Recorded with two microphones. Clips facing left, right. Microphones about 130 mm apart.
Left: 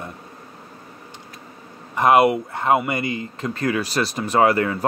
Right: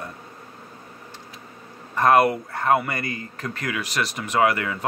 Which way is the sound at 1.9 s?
20° left (ahead or behind).